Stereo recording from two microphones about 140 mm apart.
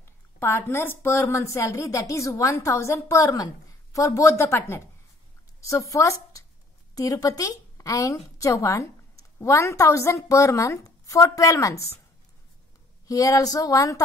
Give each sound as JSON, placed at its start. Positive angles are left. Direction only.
{"t": 0.0, "sound": "a woman's voice", "side_deg": 20}
{"t": 13.0, "sound": "a woman's voice", "side_deg": 25}